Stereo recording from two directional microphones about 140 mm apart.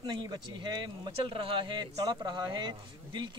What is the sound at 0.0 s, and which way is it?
Speech, 30° right (ahead or behind).